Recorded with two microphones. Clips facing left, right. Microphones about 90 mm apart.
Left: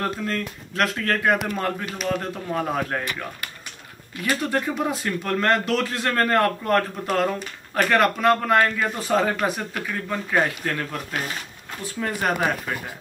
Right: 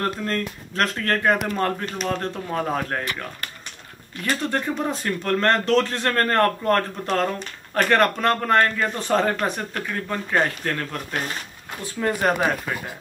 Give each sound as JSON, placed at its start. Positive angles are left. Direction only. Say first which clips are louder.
{"t": 0.0, "sound": "speech", "louder": "right 1 dB", "side_deg": 5}
{"t": 4.2, "sound": "speech", "louder": "left 1 dB", "side_deg": 5}